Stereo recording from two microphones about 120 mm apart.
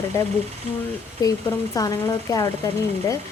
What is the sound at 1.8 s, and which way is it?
Speech, 30° left (ahead or behind).